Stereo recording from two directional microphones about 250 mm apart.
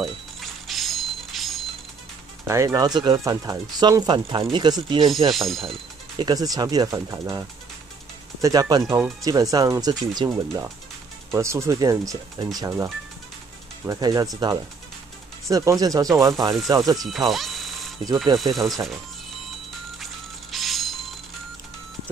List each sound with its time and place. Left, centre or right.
0.0 s music: centre
2.4 s speech: centre
5.3 s speech: centre
6.1 s speech: centre
15.4 s speech: centre
17.0 s a sound: centre
18.3 s speech: centre
20.5 s a sound: centre